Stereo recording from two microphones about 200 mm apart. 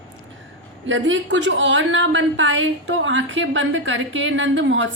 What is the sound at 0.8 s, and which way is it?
A woman's voice, 70° right (ahead or behind).